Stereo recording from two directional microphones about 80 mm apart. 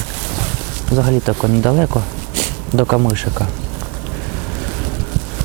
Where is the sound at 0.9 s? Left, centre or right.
Centre.